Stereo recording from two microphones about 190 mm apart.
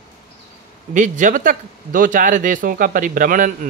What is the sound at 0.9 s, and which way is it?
A man's voice, 40° right (ahead or behind).